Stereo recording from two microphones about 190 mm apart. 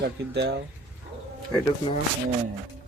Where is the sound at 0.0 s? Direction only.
65° right (ahead or behind).